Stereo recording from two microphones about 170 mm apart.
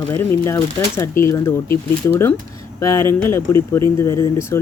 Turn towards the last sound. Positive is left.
turn(degrees=15)  # may be behind; listen again after turning